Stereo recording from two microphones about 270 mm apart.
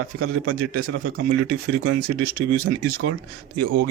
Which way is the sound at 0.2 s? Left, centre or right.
Right.